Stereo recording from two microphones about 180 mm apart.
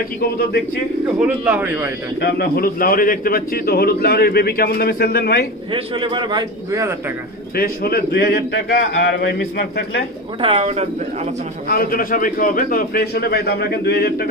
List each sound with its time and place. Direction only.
1.2 s speech: 10° right (ahead or behind)
2.1 s speech: 60° left (ahead or behind)
5.7 s a man's voice: 30° right (ahead or behind)
7.5 s speech: 60° left (ahead or behind)
10.4 s speech: 35° right (ahead or behind)
11.6 s speech: 55° left (ahead or behind)